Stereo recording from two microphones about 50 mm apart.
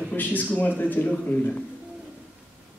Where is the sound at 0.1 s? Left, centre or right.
Left.